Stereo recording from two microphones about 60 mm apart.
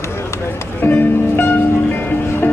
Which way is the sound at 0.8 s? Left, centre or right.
Left.